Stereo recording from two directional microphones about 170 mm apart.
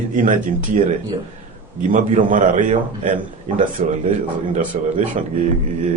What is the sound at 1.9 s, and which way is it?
Speech, 50° right (ahead or behind).